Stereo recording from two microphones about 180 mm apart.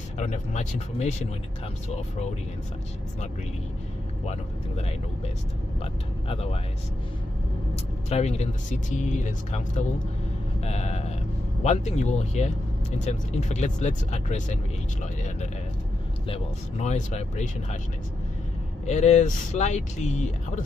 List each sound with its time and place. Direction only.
0.2 s speech: 40° left (ahead or behind)
4.3 s speech: 35° left (ahead or behind)
8.1 s speech: 35° left (ahead or behind)
16.3 s speech: 40° left (ahead or behind)
18.9 s speech: 40° left (ahead or behind)